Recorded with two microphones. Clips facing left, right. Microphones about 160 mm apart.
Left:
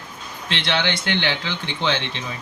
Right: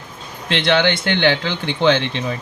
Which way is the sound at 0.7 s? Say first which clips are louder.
Right 6 dB; 55° right (ahead or behind).